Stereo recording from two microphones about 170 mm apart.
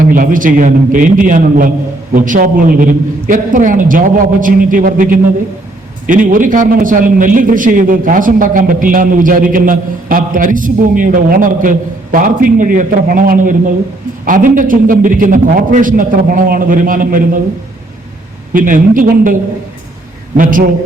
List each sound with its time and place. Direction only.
0.0 s a man's voice: 55° right (ahead or behind)
18.5 s a man's voice: 55° right (ahead or behind)